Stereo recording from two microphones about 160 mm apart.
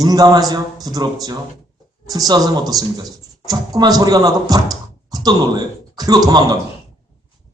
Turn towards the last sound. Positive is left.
turn(degrees=-25)  # may be behind; listen again after turning